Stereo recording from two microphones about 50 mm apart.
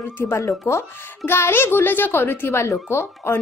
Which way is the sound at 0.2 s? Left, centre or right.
Left.